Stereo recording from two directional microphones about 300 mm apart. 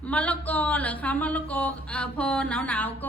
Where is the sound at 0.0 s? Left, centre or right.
Centre.